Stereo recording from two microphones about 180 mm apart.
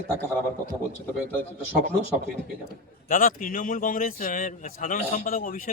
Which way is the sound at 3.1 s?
50° left (ahead or behind).